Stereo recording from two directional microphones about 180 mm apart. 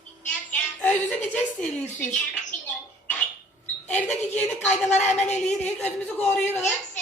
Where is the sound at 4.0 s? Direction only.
10° left (ahead or behind).